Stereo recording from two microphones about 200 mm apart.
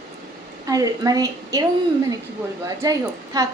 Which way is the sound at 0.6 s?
20° right (ahead or behind).